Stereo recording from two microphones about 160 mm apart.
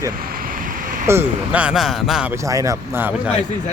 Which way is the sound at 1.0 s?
10° right (ahead or behind).